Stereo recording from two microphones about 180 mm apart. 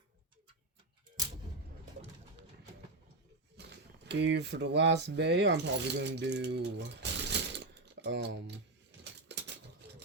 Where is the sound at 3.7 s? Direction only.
70° right (ahead or behind).